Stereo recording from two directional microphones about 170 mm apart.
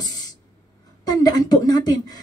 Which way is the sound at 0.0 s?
25° left (ahead or behind).